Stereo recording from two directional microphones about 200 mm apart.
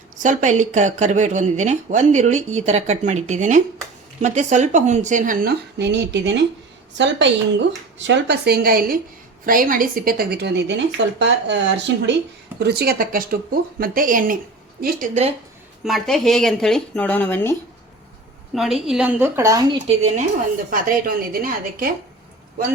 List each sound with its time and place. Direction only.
0.2 s speech: 40° right (ahead or behind)
15.8 s speech: centre (ahead or behind)
18.5 s speech: centre (ahead or behind); by 19.8 s 15° right (ahead or behind)
20.7 s speech: 45° right (ahead or behind)